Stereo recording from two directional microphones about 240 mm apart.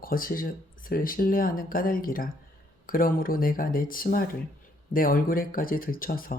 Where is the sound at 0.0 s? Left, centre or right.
Left.